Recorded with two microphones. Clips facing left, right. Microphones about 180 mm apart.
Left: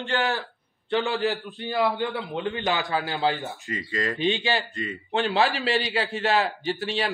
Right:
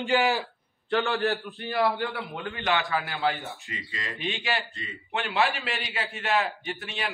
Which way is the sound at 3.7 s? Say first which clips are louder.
Left 13 dB; 45° left (ahead or behind).